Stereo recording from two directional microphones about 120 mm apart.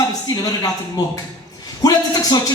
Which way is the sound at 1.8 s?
30° left (ahead or behind).